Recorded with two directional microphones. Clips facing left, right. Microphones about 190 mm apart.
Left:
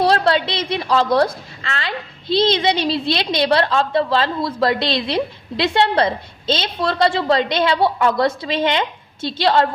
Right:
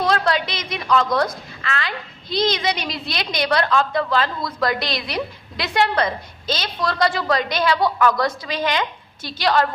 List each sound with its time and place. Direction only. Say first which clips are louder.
0.0 s a woman's voice: left 4 dB; 30° left (ahead or behind)